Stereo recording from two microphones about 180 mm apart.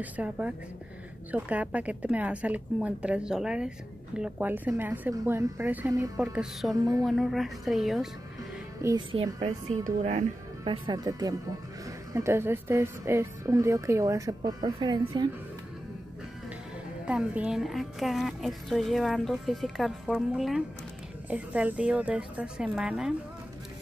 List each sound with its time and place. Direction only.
0.0 s a woman's voice: 10° right (ahead or behind)
8.8 s speech: 25° right (ahead or behind)
9.4 s speech: 40° right (ahead or behind)
10.6 s a woman's voice: 25° right (ahead or behind)
17.0 s a woman's voice: 5° right (ahead or behind)